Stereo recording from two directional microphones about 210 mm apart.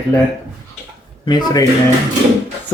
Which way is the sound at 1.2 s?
20° left (ahead or behind).